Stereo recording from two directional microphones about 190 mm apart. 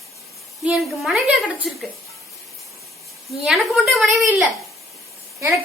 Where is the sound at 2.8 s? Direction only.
Centre (ahead or behind).